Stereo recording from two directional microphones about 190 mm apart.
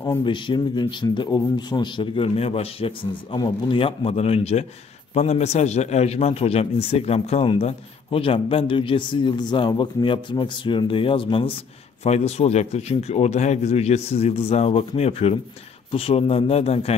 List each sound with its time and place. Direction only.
0.2 s a man's voice: 25° left (ahead or behind)